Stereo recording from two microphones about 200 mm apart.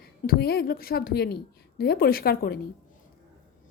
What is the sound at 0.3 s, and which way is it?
A woman's voice, 50° left (ahead or behind).